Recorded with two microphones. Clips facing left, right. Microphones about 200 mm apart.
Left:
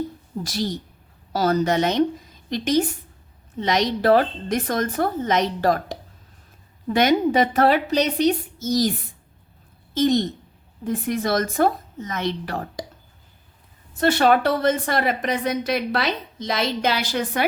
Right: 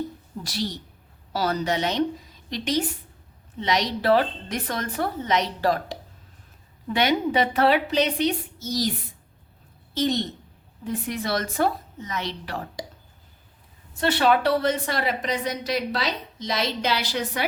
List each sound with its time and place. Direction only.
0.4 s a woman's voice: 45° left (ahead or behind)
9.9 s a woman's voice: 50° left (ahead or behind)
14.0 s a woman's voice: 45° left (ahead or behind)